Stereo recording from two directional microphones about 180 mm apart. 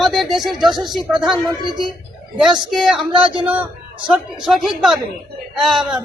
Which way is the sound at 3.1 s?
30° right (ahead or behind).